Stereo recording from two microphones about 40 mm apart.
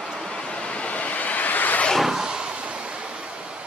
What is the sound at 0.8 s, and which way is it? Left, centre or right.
Vehicle, left.